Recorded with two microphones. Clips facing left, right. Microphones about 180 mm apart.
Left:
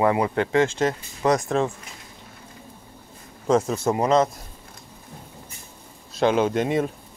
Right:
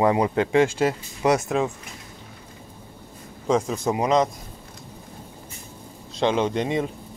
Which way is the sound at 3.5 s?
5° left (ahead or behind).